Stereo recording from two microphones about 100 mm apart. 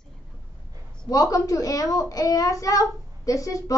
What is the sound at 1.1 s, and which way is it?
A child's voice, 35° left (ahead or behind).